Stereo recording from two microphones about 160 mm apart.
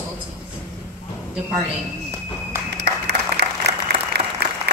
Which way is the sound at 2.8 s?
90° right.